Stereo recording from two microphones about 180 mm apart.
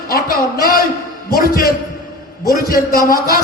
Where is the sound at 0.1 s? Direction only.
55° left (ahead or behind).